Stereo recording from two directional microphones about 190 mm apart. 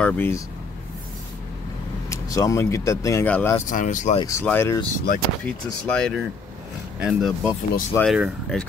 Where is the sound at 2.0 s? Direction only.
15° left (ahead or behind).